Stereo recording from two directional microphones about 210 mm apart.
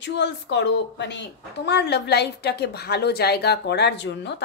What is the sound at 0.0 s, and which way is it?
A woman's voice, 55° left (ahead or behind).